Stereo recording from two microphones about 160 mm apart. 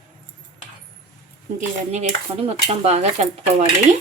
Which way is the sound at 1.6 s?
45° right (ahead or behind).